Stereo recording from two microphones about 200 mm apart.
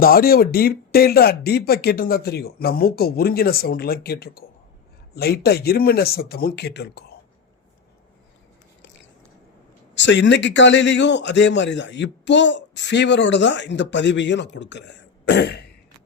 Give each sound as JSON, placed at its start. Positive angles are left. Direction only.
{"t": 0.0, "sound": "speech", "side_deg": 50}
{"t": 9.9, "sound": "a man's voice", "side_deg": 65}